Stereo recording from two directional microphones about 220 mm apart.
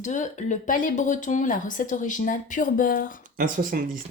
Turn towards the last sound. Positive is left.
turn(degrees=-40)  # may be behind; listen again after turning